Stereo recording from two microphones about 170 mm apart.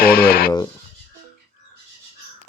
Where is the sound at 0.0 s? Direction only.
65° left (ahead or behind).